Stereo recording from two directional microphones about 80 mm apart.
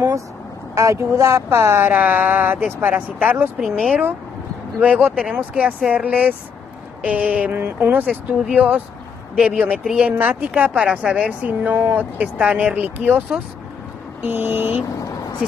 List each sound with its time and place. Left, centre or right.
0.7 s a woman's voice: right
3.6 s speech: centre
4.7 s a woman's voice: centre
10.1 s a woman's voice: right
14.2 s a woman's voice: right